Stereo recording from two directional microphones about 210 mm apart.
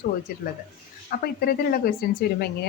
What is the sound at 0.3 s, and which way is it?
A woman's voice, 45° left (ahead or behind).